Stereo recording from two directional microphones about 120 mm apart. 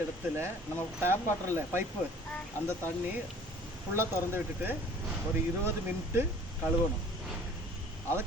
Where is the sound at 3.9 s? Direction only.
20° right (ahead or behind).